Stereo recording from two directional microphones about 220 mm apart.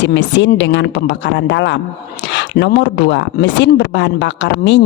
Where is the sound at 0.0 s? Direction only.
55° left (ahead or behind).